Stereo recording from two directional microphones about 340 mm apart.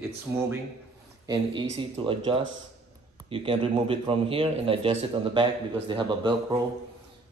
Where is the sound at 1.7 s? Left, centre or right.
Centre.